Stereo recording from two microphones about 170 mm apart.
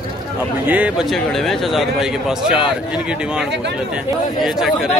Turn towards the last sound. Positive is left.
turn(degrees=0)  # may be behind; listen again after turning